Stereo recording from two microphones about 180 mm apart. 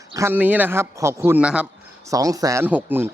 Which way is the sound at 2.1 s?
20° right (ahead or behind).